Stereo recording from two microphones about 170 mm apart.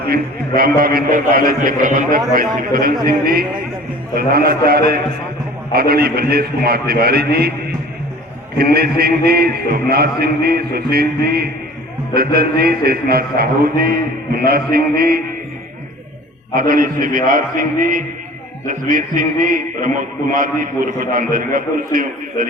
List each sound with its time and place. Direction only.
0.1 s a man's voice: 60° right (ahead or behind)
8.5 s a man's voice: 65° right (ahead or behind)
16.6 s a man's voice: 55° right (ahead or behind)